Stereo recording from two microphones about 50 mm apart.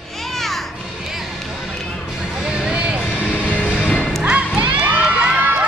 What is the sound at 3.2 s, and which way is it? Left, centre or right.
Music, left.